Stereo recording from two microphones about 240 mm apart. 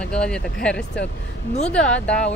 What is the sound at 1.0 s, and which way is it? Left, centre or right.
Speech, left.